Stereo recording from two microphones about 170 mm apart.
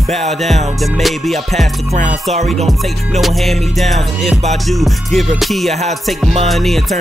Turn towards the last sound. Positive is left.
turn(degrees=0)  # may be behind; listen again after turning